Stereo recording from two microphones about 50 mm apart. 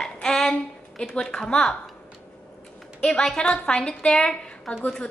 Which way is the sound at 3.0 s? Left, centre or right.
Centre.